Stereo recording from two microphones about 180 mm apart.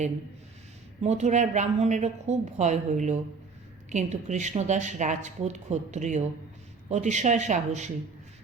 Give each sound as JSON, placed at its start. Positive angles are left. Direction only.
{"t": 1.0, "sound": "speech", "side_deg": -40}